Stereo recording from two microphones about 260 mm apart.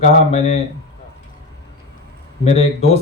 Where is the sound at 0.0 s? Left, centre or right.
Left.